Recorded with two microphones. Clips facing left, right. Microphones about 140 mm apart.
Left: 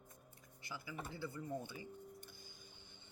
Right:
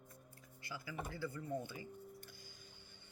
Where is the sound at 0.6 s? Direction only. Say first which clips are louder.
Right 2 dB; 20° left (ahead or behind).